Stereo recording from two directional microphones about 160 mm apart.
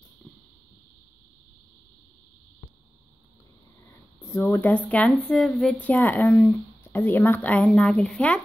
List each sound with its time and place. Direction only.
4.2 s speech: 20° left (ahead or behind)